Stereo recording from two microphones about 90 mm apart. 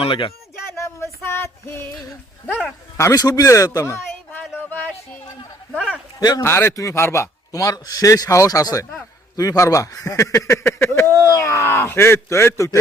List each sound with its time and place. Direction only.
0.0 s speech: 85° left
0.8 s a sound: 30° left (ahead or behind)
3.0 s a man's voice: 40° left (ahead or behind)
6.1 s a man's voice: 45° left (ahead or behind)
6.4 s a man's voice: 30° left (ahead or behind)